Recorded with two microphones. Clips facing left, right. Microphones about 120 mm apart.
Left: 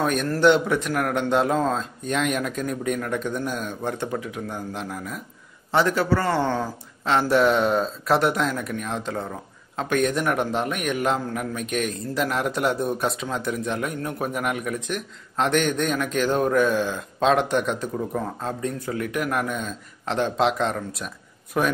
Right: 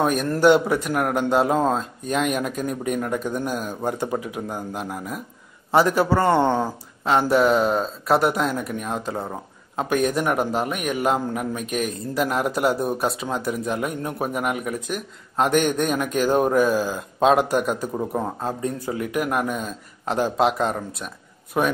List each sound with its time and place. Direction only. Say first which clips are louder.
0.0 s a man's voice: right 1 dB; 5° right (ahead or behind)
7.1 s a man's voice: right 1 dB; 5° right (ahead or behind)
17.9 s speech: right 2 dB; 25° right (ahead or behind)
18.4 s a man's voice: right 2 dB; 10° right (ahead or behind)